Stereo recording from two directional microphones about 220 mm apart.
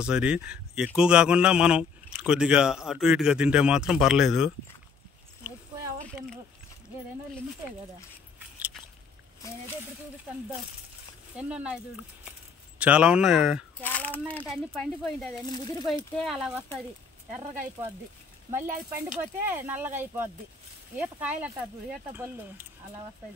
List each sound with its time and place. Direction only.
0.0 s a man's voice: 5° right (ahead or behind)
7.6 s speech: 15° right (ahead or behind)
11.3 s a man's voice: 5° right (ahead or behind)
13.8 s speech: 10° left (ahead or behind)
15.4 s speech: 20° left (ahead or behind)
16.2 s a man's voice: centre (ahead or behind)
18.5 s speech: 10° right (ahead or behind)